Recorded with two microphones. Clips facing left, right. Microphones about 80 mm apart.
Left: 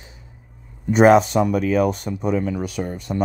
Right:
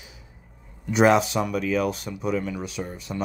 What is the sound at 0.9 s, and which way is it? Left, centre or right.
Speech, left.